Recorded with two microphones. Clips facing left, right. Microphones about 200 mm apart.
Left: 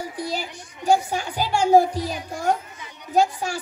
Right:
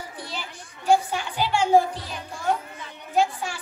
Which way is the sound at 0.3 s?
40° left (ahead or behind).